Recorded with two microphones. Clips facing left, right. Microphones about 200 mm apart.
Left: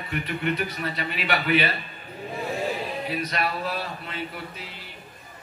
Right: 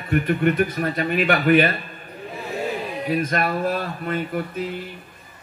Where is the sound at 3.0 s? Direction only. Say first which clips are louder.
Right 8 dB; 50° right (ahead or behind).